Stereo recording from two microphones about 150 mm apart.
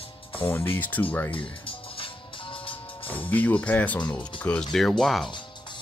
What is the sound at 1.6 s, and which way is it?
Music, 35° left (ahead or behind).